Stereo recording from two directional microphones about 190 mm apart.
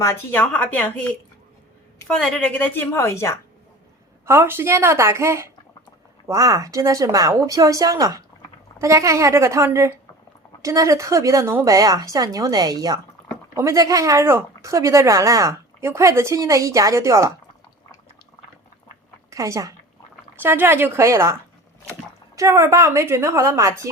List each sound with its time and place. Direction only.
0.0 s a woman's voice: 10° left (ahead or behind)
4.3 s speech: 15° right (ahead or behind)
19.3 s a woman's voice: 15° right (ahead or behind)
22.4 s speech: 15° right (ahead or behind)